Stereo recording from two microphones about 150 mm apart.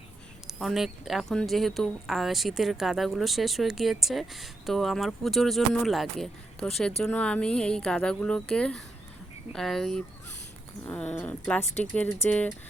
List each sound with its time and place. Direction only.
0.4 s speech: 5° right (ahead or behind); by 12.5 s 15° left (ahead or behind)